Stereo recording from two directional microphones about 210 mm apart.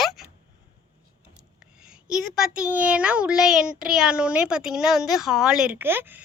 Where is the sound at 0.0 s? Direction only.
Centre (ahead or behind).